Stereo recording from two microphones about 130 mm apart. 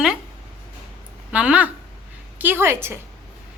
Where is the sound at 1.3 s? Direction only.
10° right (ahead or behind).